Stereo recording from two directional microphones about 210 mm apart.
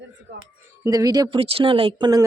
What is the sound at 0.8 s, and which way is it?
Speech, 15° right (ahead or behind).